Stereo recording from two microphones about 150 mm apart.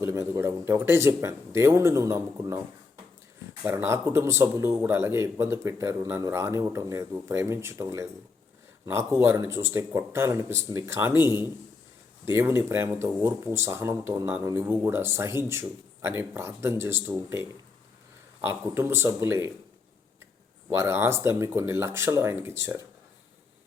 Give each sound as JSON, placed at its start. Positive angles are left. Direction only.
{"t": 0.0, "sound": "speech", "side_deg": -20}
{"t": 3.6, "sound": "speech", "side_deg": -15}
{"t": 18.4, "sound": "speech", "side_deg": -15}
{"t": 20.7, "sound": "speech", "side_deg": -20}